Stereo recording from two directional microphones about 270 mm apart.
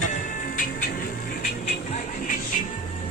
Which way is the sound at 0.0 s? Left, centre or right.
Left.